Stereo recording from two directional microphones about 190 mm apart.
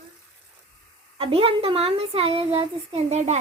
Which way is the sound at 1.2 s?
30° right (ahead or behind).